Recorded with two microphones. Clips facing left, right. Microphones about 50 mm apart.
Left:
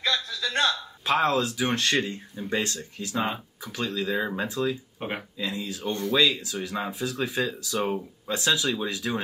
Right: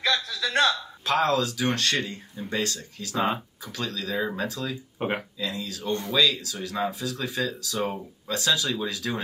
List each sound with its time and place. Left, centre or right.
0.0 s a sound: right
1.0 s speech: left
4.9 s speech: centre
5.6 s speech: left